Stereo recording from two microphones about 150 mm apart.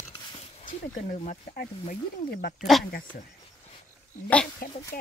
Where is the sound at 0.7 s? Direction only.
60° left (ahead or behind).